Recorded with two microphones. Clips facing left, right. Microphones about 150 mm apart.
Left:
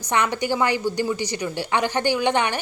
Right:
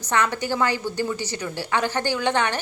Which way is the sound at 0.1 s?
15° left (ahead or behind).